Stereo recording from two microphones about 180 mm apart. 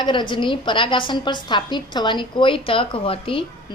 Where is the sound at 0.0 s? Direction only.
25° left (ahead or behind).